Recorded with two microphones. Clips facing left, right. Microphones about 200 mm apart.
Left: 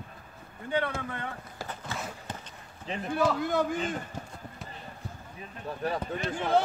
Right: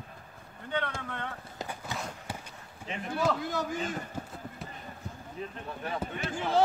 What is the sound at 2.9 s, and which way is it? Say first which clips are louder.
Speech: left 3 dB; 35° left (ahead or behind).